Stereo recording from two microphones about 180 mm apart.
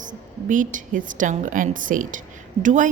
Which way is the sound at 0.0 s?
45° right (ahead or behind).